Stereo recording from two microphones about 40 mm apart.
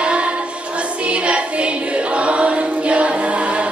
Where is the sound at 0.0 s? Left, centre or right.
Right.